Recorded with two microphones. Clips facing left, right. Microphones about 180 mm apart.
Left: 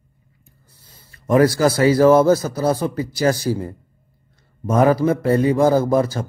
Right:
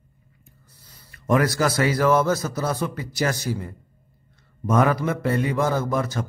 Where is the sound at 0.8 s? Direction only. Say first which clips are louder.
Even; 25° left (ahead or behind).